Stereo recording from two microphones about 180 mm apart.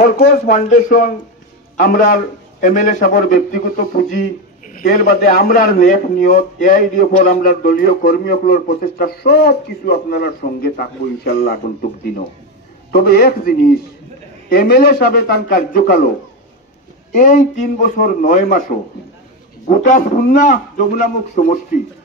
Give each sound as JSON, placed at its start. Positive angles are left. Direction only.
{"t": 0.0, "sound": "a man's voice", "side_deg": 50}
{"t": 12.9, "sound": "a man's voice", "side_deg": 60}
{"t": 17.1, "sound": "a man's voice", "side_deg": 45}
{"t": 19.7, "sound": "a man's voice", "side_deg": 50}